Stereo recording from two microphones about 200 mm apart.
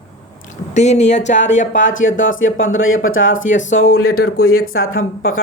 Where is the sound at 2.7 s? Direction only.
85° left.